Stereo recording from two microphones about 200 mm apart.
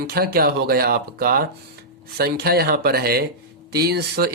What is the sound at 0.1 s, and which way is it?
Speech, 50° right (ahead or behind).